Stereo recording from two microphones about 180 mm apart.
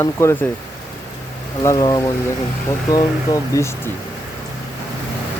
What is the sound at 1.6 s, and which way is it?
Speech, 20° left (ahead or behind).